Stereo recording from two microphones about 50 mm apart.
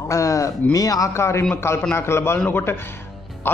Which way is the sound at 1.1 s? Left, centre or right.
Left.